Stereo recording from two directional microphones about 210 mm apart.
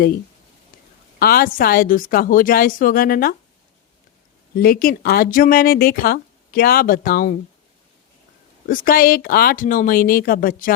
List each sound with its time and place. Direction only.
1.2 s speech: 45° left (ahead or behind)
4.5 s speech: 45° left (ahead or behind)
8.6 s speech: 45° left (ahead or behind)